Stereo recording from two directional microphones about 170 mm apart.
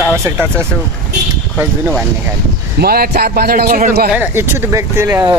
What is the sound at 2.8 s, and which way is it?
A man's voice, 60° right (ahead or behind).